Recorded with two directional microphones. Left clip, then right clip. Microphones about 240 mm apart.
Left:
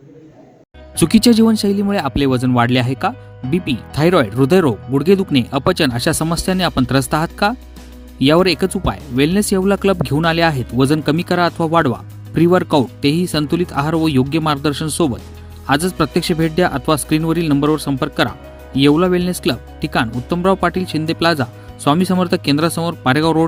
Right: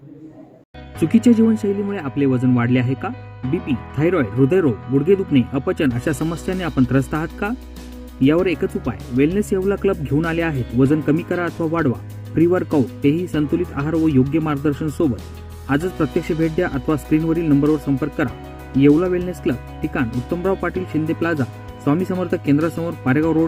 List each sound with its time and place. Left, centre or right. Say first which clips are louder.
0.9 s speech: left 3 dB; left